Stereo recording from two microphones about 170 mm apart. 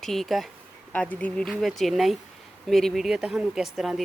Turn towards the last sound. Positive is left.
turn(degrees=0)  # may be behind; listen again after turning